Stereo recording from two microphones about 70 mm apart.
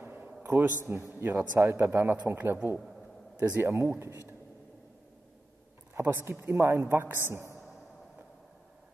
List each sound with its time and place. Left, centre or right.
0.0 s a sound: right
0.4 s a man's voice: right
3.6 s a woman's voice: right
5.9 s a woman's voice: right